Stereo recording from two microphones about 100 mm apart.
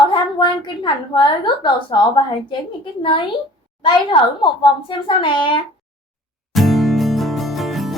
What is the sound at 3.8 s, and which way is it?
A woman's voice, 55° left (ahead or behind).